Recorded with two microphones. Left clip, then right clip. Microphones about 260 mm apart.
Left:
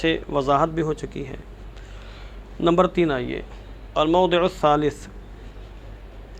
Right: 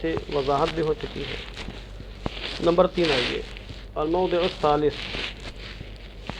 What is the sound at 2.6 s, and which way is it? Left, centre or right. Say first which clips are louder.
Speech: left 1 dB; left.